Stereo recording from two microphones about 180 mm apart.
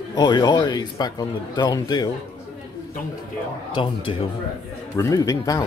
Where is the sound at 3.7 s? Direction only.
30° left (ahead or behind).